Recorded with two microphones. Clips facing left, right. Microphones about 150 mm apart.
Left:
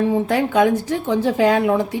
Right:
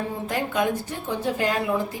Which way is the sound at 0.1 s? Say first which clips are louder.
Left 9 dB; 85° left.